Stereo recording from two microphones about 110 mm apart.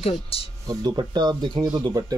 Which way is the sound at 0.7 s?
40° right (ahead or behind).